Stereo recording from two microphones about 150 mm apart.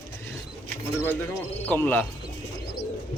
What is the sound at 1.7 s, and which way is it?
Speech, 10° left (ahead or behind).